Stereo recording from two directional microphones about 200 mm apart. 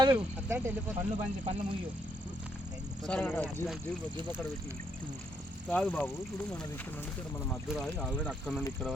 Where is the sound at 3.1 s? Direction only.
10° left (ahead or behind).